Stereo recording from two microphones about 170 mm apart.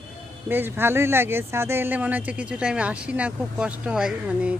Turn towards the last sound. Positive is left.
turn(degrees=-5)  # may be behind; listen again after turning